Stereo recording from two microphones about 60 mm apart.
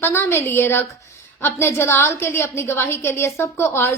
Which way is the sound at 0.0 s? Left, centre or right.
Left.